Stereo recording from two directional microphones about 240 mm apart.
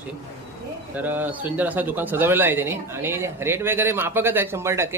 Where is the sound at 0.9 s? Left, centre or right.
Centre.